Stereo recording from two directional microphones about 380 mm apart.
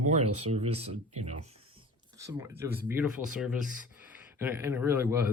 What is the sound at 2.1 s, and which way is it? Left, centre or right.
Speech, centre.